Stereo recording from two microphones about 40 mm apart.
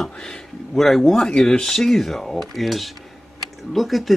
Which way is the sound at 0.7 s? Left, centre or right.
Centre.